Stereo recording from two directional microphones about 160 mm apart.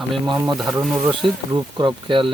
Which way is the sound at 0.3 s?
25° right (ahead or behind).